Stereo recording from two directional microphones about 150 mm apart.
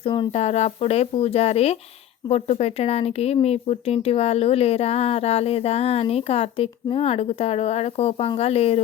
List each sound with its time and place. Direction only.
0.0 s speech: 30° left (ahead or behind)
0.3 s speech: 45° left (ahead or behind)